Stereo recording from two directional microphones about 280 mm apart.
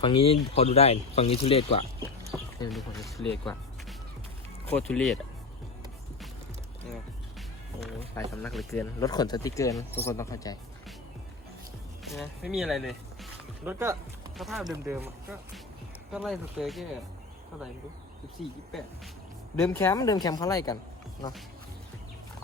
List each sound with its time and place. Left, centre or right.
0.0 s speech: centre
2.6 s speech: centre
8.1 s speech: centre
12.0 s speech: centre
18.4 s speech: centre
19.5 s speech: centre